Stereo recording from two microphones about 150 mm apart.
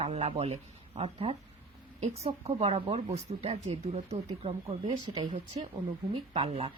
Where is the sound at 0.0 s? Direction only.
45° right (ahead or behind).